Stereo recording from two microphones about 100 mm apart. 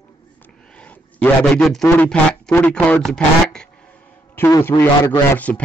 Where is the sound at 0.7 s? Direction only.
15° left (ahead or behind).